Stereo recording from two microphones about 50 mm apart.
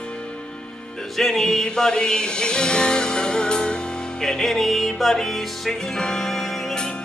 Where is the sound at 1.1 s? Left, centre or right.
Centre.